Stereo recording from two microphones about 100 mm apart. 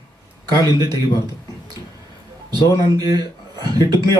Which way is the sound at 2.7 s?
40° right (ahead or behind).